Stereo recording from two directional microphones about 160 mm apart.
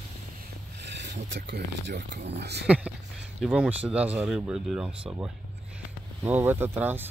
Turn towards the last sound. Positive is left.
turn(degrees=-15)  # may be behind; listen again after turning